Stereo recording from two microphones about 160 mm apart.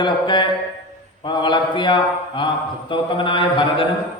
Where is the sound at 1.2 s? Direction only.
30° left (ahead or behind).